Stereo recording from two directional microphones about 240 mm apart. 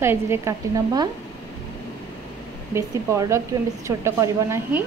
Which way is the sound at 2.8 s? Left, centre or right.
Centre.